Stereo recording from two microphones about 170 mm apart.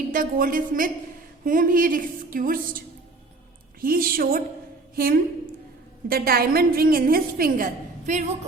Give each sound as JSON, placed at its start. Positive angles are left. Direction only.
{"t": 0.1, "sound": "a woman's voice", "side_deg": -55}